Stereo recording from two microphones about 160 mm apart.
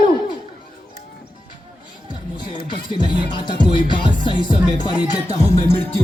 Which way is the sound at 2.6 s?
30° left (ahead or behind).